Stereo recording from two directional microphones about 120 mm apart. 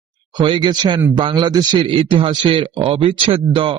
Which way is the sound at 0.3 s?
40° right (ahead or behind).